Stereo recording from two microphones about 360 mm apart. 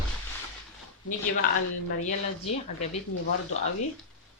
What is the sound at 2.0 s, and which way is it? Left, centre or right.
Speech, centre.